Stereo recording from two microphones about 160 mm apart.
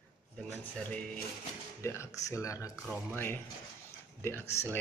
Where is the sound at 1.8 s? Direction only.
15° left (ahead or behind).